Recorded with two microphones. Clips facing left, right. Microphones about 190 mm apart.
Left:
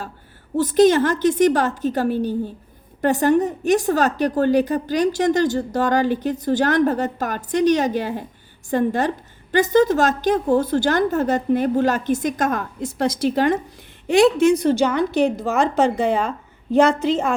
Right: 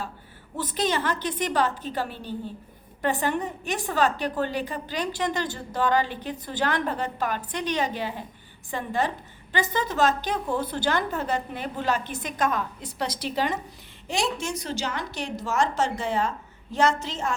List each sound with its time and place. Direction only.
0.5 s a woman's voice: 45° left (ahead or behind)